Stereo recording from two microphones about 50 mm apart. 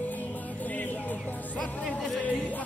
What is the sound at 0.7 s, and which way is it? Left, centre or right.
Music, left.